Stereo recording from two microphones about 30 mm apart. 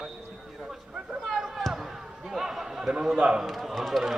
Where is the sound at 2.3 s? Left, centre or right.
Centre.